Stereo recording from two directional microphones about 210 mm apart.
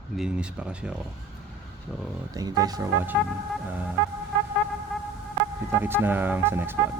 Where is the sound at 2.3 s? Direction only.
20° right (ahead or behind).